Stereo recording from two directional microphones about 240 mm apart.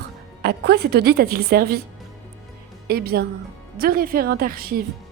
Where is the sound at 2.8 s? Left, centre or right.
Right.